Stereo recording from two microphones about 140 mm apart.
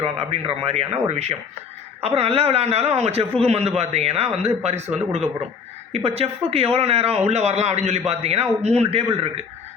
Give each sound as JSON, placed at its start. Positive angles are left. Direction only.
{"t": 0.0, "sound": "speech", "side_deg": -45}
{"t": 5.9, "sound": "speech", "side_deg": -45}